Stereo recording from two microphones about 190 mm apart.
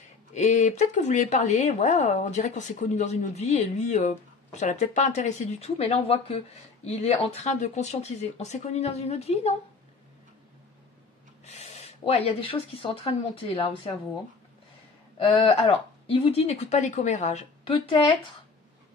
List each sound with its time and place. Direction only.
0.3 s speech: 35° left (ahead or behind)
11.4 s speech: 35° left (ahead or behind)
15.1 s speech: 30° left (ahead or behind)